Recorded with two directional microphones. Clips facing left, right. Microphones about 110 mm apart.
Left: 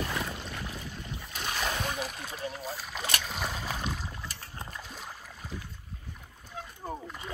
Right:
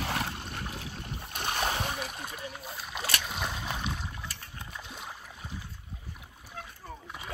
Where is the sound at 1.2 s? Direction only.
50° right (ahead or behind).